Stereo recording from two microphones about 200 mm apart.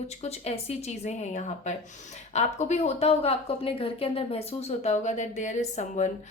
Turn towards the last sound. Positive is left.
turn(degrees=35)  # may be behind; listen again after turning